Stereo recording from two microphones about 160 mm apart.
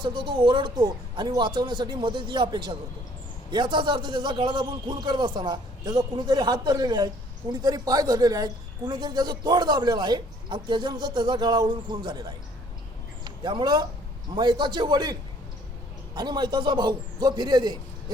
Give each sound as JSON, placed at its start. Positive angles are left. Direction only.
{"t": 0.0, "sound": "a woman's voice", "side_deg": -30}